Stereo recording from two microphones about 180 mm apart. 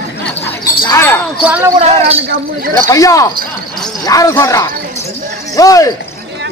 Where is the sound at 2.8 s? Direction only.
20° left (ahead or behind).